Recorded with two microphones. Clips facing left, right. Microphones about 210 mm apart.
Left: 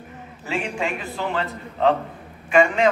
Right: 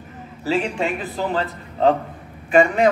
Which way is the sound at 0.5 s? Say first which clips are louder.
Right 5 dB; 35° right (ahead or behind).